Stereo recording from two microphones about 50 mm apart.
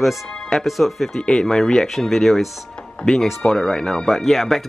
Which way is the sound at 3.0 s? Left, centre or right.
Centre.